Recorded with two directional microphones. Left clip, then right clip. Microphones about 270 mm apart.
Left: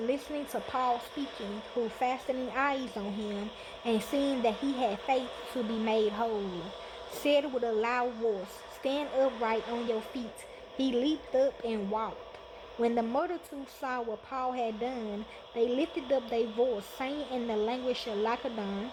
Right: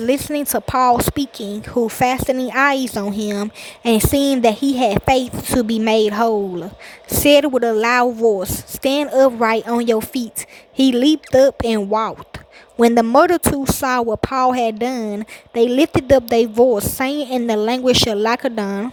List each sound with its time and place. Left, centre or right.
0.0 s a woman's voice: right